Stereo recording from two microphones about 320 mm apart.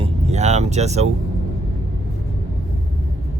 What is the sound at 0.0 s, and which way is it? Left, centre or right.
Music, right.